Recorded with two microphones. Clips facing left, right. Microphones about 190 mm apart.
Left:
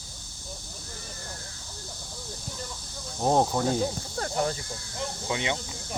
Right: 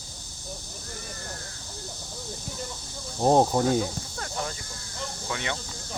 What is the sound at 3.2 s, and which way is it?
Speech, 20° right (ahead or behind).